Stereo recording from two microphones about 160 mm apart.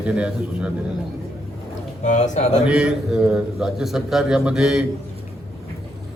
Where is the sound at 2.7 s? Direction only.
5° right (ahead or behind).